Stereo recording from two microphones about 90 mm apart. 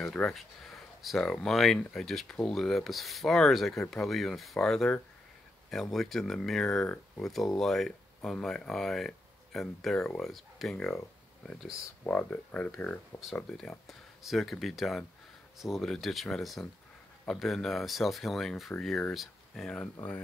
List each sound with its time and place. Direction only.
0.0 s speech: 5° left (ahead or behind)
12.1 s speech: 15° left (ahead or behind)
13.1 s speech: 30° left (ahead or behind)
13.5 s speech: 5° left (ahead or behind)